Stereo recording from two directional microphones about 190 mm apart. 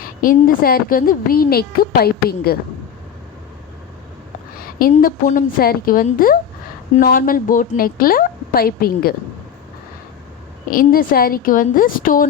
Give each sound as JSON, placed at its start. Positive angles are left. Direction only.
{"t": 0.0, "sound": "a woman's voice", "side_deg": 45}
{"t": 4.8, "sound": "a woman's voice", "side_deg": 50}
{"t": 10.7, "sound": "a woman's voice", "side_deg": 50}